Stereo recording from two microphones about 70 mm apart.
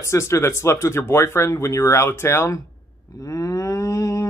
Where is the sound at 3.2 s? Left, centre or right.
Left.